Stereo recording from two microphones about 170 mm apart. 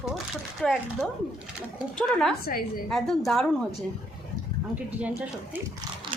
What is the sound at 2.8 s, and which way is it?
Speech, 5° left (ahead or behind).